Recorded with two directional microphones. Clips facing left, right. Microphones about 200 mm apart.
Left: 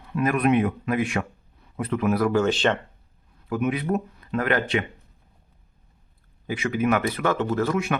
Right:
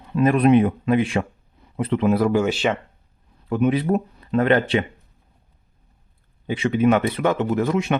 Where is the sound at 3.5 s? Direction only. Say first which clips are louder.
Right 5 dB; 30° right (ahead or behind).